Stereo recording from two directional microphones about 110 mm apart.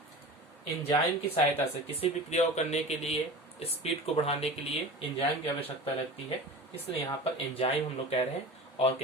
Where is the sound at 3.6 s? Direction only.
60° left (ahead or behind).